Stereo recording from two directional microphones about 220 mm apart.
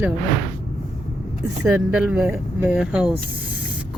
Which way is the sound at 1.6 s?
5° right (ahead or behind).